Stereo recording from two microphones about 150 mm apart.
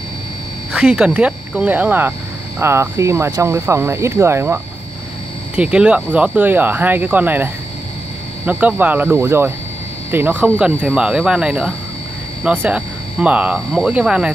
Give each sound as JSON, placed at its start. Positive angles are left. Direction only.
{"t": 0.7, "sound": "speech", "side_deg": -5}
{"t": 5.6, "sound": "speech", "side_deg": -5}